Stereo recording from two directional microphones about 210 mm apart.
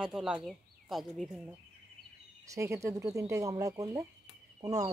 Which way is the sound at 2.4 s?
15° right (ahead or behind).